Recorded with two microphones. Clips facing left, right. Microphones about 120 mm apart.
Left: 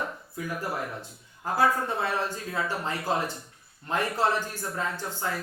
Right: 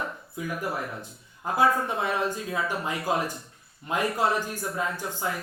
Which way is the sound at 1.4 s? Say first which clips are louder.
Right 1 dB; 15° right (ahead or behind).